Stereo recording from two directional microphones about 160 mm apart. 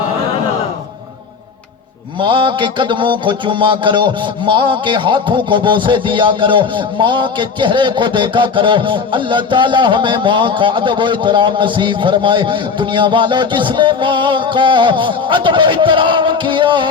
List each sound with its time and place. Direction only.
2.2 s speech: 30° right (ahead or behind)